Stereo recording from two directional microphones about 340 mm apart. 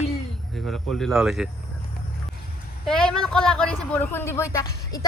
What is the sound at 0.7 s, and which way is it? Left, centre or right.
Speech, centre.